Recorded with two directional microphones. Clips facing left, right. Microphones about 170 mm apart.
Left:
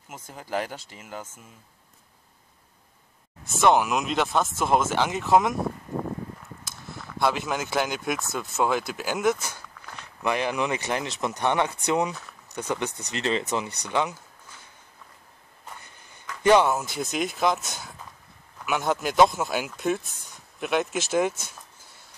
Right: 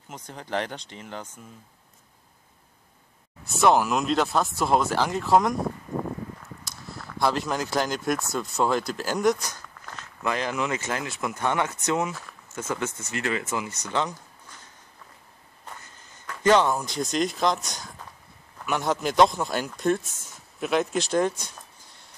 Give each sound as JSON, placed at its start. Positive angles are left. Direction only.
{"t": 0.1, "sound": "speech", "side_deg": 5}
{"t": 3.4, "sound": "speech", "side_deg": 0}
{"t": 6.6, "sound": "speech", "side_deg": 0}
{"t": 10.2, "sound": "speech", "side_deg": 15}
{"t": 16.4, "sound": "speech", "side_deg": 10}